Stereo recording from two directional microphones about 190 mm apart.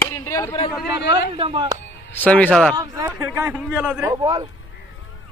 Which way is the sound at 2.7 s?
20° right (ahead or behind).